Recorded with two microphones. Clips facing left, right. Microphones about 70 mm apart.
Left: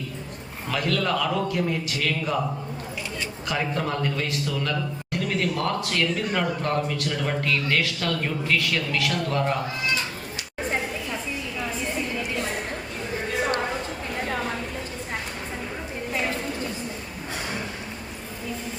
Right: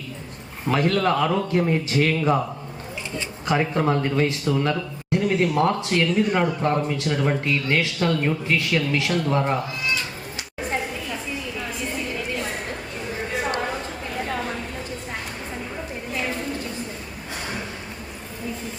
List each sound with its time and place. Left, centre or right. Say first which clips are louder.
0.7 s a man's voice: right 5 dB; right
3.4 s speech: right 6 dB; right